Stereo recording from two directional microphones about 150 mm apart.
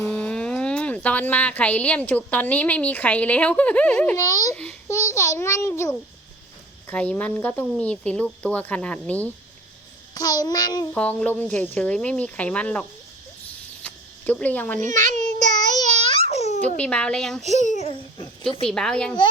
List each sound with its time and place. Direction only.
0.0 s a woman's voice: 10° left (ahead or behind)
4.2 s a child's voice: 25° left (ahead or behind)
10.2 s a child's voice: 25° left (ahead or behind)
10.9 s speech: 10° left (ahead or behind)
13.8 s a sound: 10° left (ahead or behind)
15.0 s child singing: 50° right (ahead or behind)
16.2 s babbling: 45° left (ahead or behind)
16.7 s speech: 10° left (ahead or behind)
17.4 s a child's voice: 50° left (ahead or behind)
18.7 s speech: 5° left (ahead or behind)